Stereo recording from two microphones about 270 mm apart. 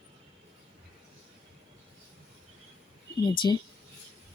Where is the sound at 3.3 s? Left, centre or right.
Centre.